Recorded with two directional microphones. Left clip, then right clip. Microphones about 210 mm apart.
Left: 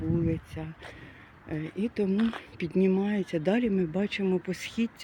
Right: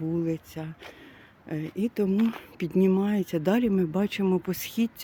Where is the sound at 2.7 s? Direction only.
25° right (ahead or behind).